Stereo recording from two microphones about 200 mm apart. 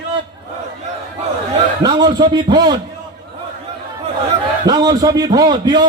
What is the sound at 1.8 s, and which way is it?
Speech, 20° right (ahead or behind).